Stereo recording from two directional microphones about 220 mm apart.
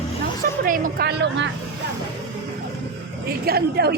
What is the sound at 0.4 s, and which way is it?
A woman's voice, 40° right (ahead or behind).